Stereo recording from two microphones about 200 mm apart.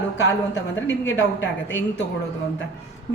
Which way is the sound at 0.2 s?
60° left (ahead or behind).